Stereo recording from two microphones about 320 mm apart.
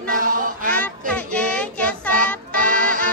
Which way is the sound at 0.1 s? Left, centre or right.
Right.